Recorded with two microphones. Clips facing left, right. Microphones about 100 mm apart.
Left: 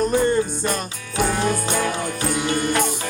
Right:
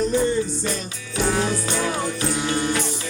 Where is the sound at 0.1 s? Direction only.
55° left (ahead or behind).